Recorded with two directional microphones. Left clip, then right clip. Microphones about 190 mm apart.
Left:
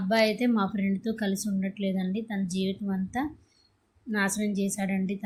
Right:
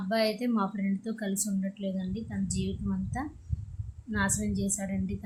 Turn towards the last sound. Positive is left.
turn(degrees=15)  # may be behind; listen again after turning